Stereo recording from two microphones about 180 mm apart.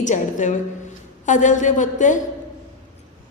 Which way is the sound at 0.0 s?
45° left (ahead or behind).